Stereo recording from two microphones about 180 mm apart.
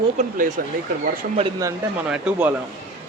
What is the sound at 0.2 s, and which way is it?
Speech, 50° right (ahead or behind).